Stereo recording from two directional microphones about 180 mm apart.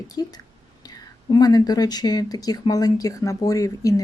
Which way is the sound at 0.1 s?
20° left (ahead or behind).